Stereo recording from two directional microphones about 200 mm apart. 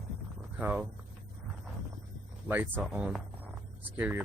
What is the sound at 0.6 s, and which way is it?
Speech, 5° right (ahead or behind).